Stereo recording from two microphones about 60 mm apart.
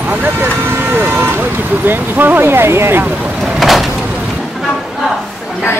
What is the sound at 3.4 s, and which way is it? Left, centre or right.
Vehicle, centre.